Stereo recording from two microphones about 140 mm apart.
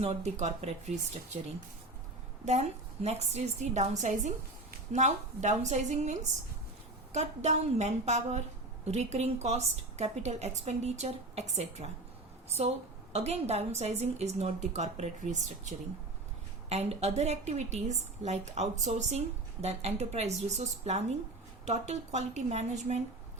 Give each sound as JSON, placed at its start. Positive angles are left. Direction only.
{"t": 0.0, "sound": "a woman's voice", "side_deg": -50}
{"t": 2.4, "sound": "a woman's voice", "side_deg": -55}
{"t": 13.1, "sound": "a woman's voice", "side_deg": -50}
{"t": 16.6, "sound": "a woman's voice", "side_deg": -50}